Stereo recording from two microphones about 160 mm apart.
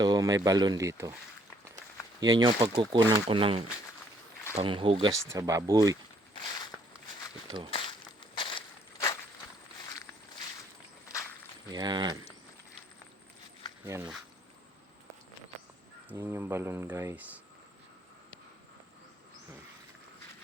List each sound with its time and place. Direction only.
0.0 s speech: 25° right (ahead or behind)
2.2 s speech: 30° right (ahead or behind)
5.3 s speech: 20° right (ahead or behind)
6.3 s a sound: 25° left (ahead or behind)
8.4 s crushing: 30° left (ahead or behind)
11.7 s speech: 25° right (ahead or behind)
13.8 s speech: 15° right (ahead or behind)
16.0 s speech: 15° right (ahead or behind)